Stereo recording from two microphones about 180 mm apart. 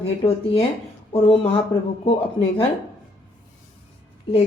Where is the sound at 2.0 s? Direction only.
35° left (ahead or behind).